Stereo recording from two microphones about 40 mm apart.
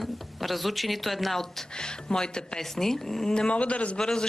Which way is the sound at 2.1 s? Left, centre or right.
Centre.